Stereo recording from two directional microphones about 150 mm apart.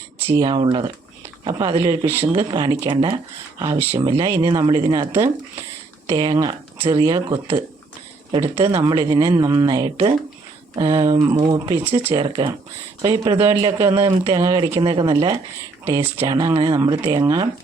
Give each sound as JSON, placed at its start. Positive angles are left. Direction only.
{"t": 0.3, "sound": "speech", "side_deg": -25}
{"t": 2.5, "sound": "speech", "side_deg": -30}
{"t": 3.6, "sound": "speech", "side_deg": -20}